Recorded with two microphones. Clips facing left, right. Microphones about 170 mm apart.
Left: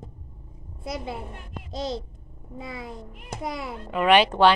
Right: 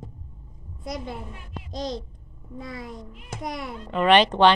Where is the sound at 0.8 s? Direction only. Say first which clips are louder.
Left 1 dB; 5° left (ahead or behind).